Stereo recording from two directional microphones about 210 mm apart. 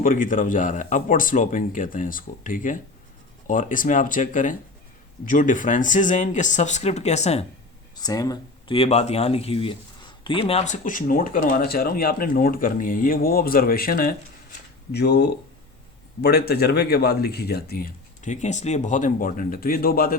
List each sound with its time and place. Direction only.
0.0 s speech: 40° left (ahead or behind)
7.9 s speech: 20° left (ahead or behind); by 20.1 s 45° left (ahead or behind)